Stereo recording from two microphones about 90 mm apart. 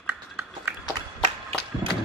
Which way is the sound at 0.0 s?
25° right (ahead or behind).